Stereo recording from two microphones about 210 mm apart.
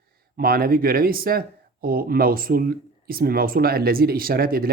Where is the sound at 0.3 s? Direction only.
45° right (ahead or behind).